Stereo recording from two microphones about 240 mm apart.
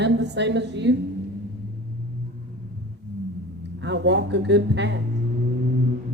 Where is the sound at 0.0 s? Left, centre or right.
Right.